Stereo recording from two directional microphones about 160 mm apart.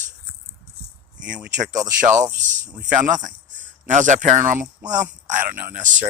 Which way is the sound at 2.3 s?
50° right (ahead or behind).